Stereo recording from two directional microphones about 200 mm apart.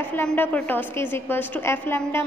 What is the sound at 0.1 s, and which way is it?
A woman's voice, 10° left (ahead or behind).